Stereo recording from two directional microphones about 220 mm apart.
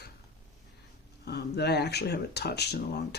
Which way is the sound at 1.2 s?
50° left (ahead or behind).